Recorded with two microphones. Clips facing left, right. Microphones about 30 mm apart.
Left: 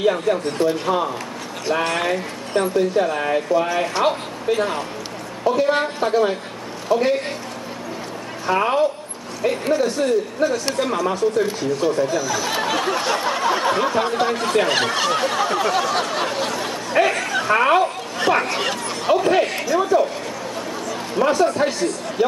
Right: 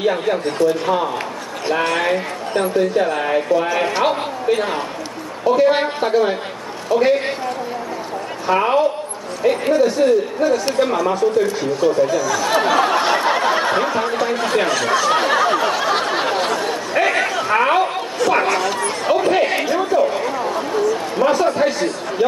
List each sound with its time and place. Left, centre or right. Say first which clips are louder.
0.3 s speech: right 1 dB; centre
0.8 s speech: right 2 dB; centre
8.5 s speech: right 2 dB; centre
12.6 s a sound: right 5 dB; centre
14.3 s speech: right 1 dB; centre
15.0 s a sound: right 4 dB; centre
17.0 s a sound: even; centre
17.3 s speech: even; centre
18.2 s speech: right 1 dB; left
19.1 s speech: even; centre
19.4 s speech: right 3 dB; right
19.8 s speech: even; centre
20.2 s a sound: right 7 dB; right
21.2 s speech: right 1 dB; centre